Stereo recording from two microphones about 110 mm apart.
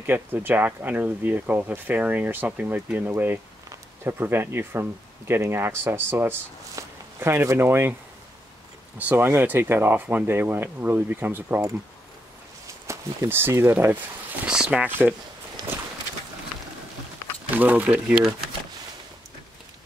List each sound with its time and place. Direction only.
0.0 s speech: 20° right (ahead or behind)
8.9 s speech: 20° right (ahead or behind)
12.8 s speech: 25° right (ahead or behind)
14.4 s speech: 5° right (ahead or behind)
15.6 s a sound: 35° right (ahead or behind)
17.5 s speech: 15° right (ahead or behind)